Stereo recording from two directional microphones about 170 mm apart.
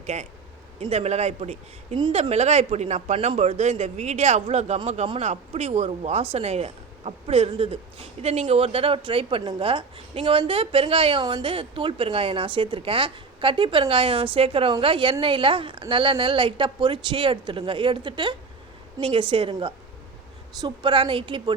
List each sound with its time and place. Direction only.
0.0 s a woman's voice: 40° right (ahead or behind)